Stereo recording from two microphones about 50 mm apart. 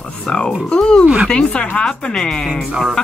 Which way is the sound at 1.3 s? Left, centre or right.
Left.